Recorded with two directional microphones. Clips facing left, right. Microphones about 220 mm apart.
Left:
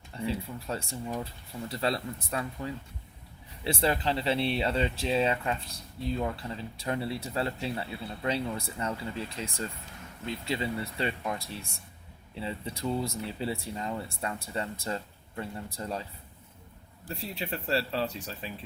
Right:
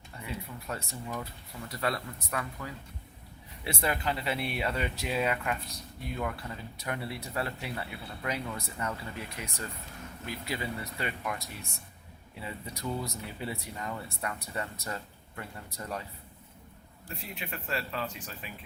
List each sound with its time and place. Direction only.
0.2 s speech: 30° left (ahead or behind)
17.1 s speech: 30° left (ahead or behind)